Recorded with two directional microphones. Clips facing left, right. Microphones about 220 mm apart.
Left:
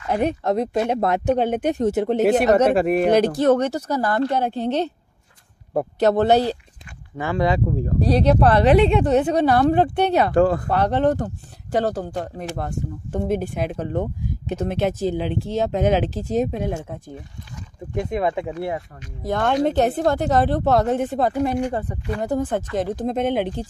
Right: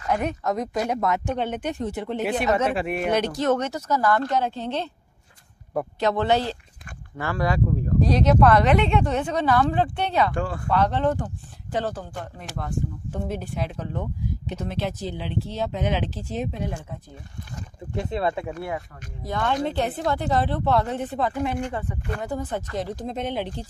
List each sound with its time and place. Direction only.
0.1 s speech: 30° left (ahead or behind)
5.7 s speech: 35° left (ahead or behind)
7.2 s speech: 20° left (ahead or behind)
8.0 s speech: 35° left (ahead or behind); by 17.0 s 50° left (ahead or behind)
17.9 s speech: 15° left (ahead or behind)
19.2 s speech: 50° left (ahead or behind)